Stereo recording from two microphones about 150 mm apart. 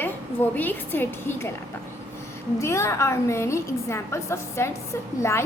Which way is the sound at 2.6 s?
20° left (ahead or behind).